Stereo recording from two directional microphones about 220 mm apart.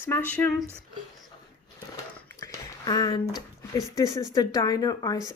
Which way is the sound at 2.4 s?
15° left (ahead or behind).